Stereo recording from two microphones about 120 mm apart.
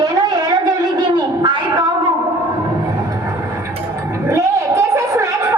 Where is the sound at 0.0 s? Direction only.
30° right (ahead or behind).